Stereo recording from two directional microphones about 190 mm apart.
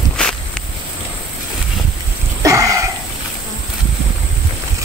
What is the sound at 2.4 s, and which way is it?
Cough, 15° right (ahead or behind).